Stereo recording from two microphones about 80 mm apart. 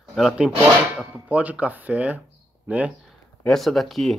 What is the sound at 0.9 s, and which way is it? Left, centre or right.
Speech, centre.